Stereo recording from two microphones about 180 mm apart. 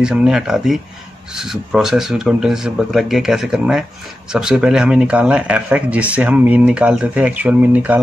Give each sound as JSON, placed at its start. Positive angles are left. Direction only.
{"t": 0.0, "sound": "speech", "side_deg": -5}